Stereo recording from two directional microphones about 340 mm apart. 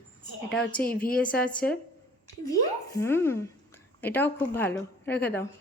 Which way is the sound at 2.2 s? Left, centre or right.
Centre.